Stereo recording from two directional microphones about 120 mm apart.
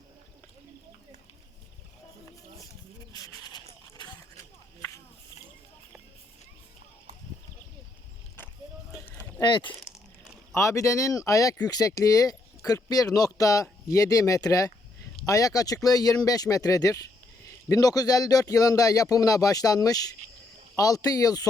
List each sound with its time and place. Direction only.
3.1 s a sound: 30° left (ahead or behind)
9.4 s speech: 40° left (ahead or behind)
10.5 s speech: 25° left (ahead or behind)